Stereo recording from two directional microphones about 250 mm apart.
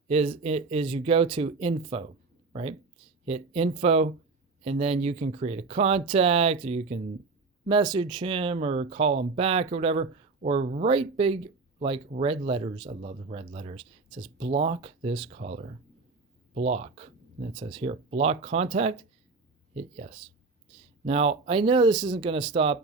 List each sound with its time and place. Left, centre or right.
0.1 s speech: right